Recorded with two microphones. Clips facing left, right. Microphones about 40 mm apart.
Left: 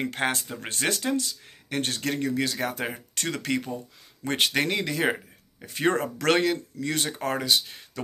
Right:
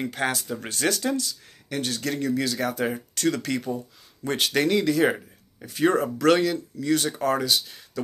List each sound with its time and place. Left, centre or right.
0.0 s speech: left
5.8 s speech: left